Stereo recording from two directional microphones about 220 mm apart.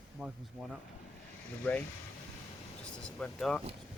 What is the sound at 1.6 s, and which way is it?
Speech, 5° left (ahead or behind).